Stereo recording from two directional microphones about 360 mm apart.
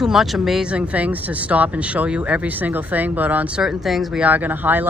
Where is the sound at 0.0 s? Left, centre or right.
Centre.